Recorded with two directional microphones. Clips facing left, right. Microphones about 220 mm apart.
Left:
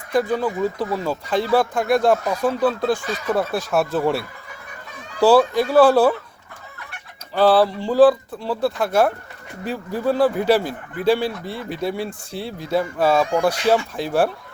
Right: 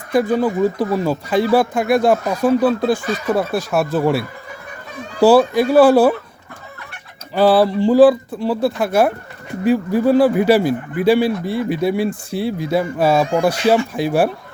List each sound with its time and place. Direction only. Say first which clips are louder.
0.1 s a man's voice: right 4 dB; 10° right (ahead or behind)
7.3 s a man's voice: right 3 dB; 10° right (ahead or behind)